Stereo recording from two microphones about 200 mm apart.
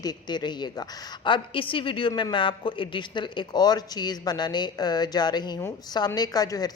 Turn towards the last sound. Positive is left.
turn(degrees=20)  # may be behind; listen again after turning